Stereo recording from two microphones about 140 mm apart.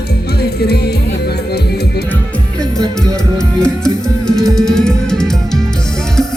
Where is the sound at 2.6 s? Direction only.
5° left (ahead or behind).